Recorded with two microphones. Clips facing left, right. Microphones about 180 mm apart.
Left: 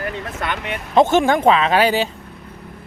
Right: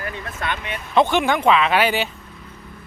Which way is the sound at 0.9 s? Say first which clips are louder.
Left 4 dB; 45° left (ahead or behind).